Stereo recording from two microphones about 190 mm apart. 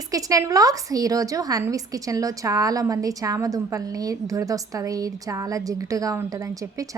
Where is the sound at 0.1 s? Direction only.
20° right (ahead or behind).